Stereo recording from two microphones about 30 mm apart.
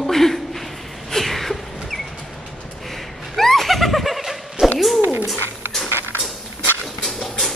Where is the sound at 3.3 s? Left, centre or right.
Centre.